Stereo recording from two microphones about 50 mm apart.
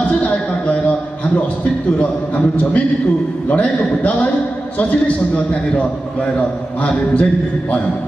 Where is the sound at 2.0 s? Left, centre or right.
Left.